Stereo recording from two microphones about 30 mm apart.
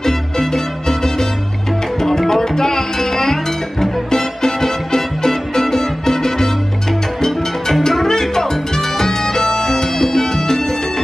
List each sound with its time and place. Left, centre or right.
0.0 s music: centre